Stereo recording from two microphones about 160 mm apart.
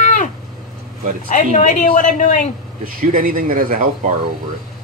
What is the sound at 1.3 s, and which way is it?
A woman's voice, 50° left (ahead or behind).